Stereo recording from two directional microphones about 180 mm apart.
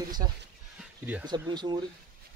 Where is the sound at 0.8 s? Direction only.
5° right (ahead or behind).